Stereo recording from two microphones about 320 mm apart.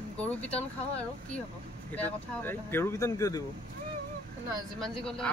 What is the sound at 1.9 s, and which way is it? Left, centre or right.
Speech, centre.